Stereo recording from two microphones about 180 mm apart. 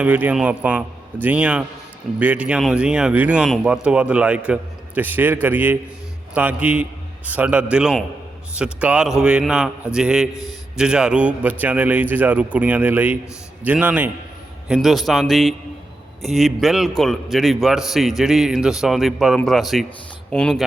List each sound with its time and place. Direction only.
0.0 s a man's voice: 10° right (ahead or behind)